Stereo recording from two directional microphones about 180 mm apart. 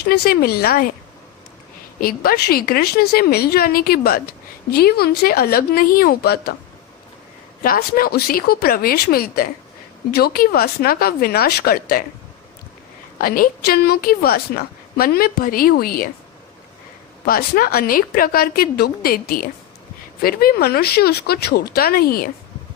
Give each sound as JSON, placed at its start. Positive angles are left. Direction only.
{"t": 0.1, "sound": "a woman's voice", "side_deg": 60}
{"t": 2.0, "sound": "a woman's voice", "side_deg": 55}
{"t": 7.6, "sound": "a woman's voice", "side_deg": 55}
{"t": 13.1, "sound": "a woman's voice", "side_deg": 50}
{"t": 17.2, "sound": "a woman's voice", "side_deg": 55}